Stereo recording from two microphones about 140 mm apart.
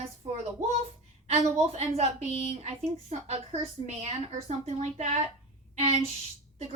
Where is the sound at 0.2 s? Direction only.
40° right (ahead or behind).